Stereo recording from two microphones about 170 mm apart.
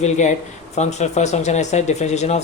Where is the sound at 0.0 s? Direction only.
45° left (ahead or behind).